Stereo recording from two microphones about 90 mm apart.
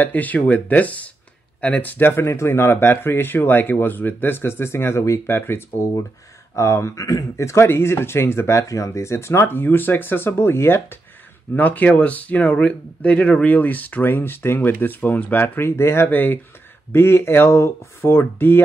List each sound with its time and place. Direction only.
0.0 s speech: 20° left (ahead or behind)